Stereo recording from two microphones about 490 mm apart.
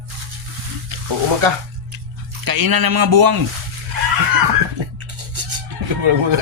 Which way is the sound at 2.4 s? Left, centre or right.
Right.